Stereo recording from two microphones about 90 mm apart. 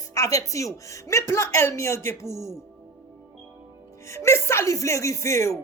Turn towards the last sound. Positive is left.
turn(degrees=35)  # may be behind; listen again after turning